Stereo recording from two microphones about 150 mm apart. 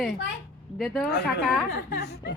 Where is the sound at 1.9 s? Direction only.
90° left.